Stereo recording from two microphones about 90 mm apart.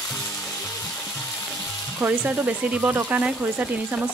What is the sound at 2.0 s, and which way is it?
Stir, 15° right (ahead or behind).